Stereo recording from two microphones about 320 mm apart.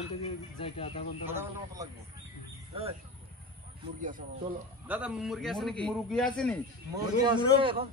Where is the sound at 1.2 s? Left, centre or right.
Centre.